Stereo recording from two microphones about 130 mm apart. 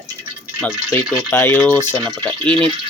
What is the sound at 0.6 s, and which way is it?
Speech, 15° left (ahead or behind).